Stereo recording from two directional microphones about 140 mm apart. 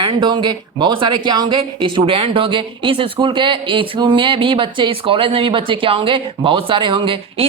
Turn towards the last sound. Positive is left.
turn(degrees=-40)  # may be behind; listen again after turning